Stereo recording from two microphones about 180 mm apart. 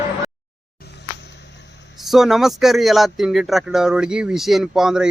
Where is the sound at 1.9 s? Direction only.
Centre (ahead or behind).